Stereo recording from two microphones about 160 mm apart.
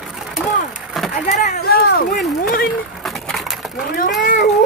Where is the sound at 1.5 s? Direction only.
75° left (ahead or behind).